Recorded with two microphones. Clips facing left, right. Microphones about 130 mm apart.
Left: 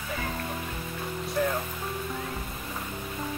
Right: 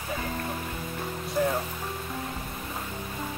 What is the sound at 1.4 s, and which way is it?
Speech, 15° right (ahead or behind).